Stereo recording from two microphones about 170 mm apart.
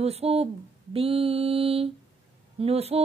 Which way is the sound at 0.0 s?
35° right (ahead or behind).